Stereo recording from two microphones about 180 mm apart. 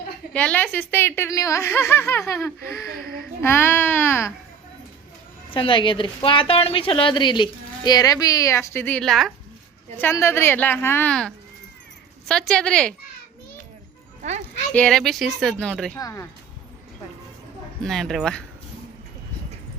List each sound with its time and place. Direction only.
0.3 s speech: 10° left (ahead or behind)
3.0 s a sound: 55° right (ahead or behind)
3.4 s speech: 10° left (ahead or behind)
5.5 s a woman's voice: 25° left (ahead or behind); by 9.3 s centre (ahead or behind)
10.0 s speech: 15° left (ahead or behind)
14.2 s music: 40° right (ahead or behind)
14.7 s speech: 5° left (ahead or behind)
16.0 s a woman's voice: 20° left (ahead or behind)
17.8 s speech: centre (ahead or behind)